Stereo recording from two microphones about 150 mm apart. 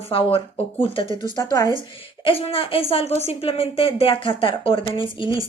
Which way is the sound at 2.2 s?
40° left (ahead or behind).